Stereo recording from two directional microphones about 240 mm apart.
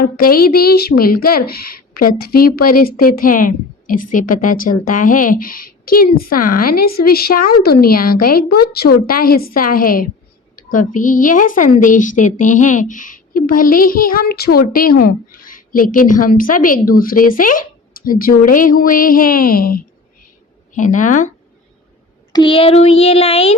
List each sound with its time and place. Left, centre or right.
0.0 s a woman's voice: left
22.3 s speech: centre